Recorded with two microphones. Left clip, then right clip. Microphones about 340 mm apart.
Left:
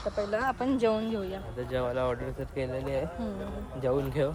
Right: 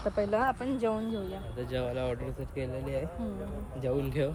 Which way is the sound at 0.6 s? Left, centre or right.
Left.